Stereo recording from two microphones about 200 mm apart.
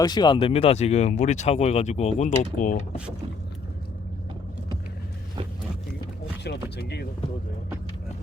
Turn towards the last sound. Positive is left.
turn(degrees=55)  # may be behind; listen again after turning